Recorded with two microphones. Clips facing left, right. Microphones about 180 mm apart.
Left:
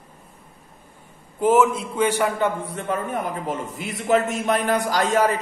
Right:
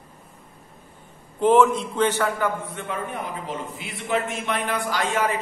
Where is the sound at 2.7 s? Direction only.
40° left (ahead or behind).